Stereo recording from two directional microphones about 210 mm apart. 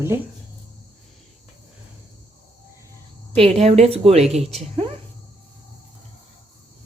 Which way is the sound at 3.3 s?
30° right (ahead or behind).